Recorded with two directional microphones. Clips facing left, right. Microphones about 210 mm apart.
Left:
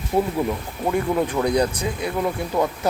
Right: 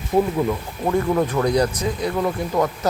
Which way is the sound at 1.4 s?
5° left (ahead or behind).